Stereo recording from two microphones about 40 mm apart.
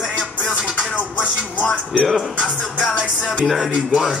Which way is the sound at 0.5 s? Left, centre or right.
Right.